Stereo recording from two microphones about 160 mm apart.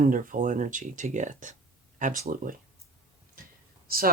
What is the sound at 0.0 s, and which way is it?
Speech, 60° right (ahead or behind).